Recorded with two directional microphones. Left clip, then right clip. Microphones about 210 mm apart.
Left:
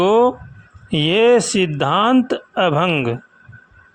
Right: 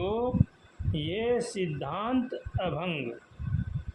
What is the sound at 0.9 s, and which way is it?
Speech, 40° left (ahead or behind).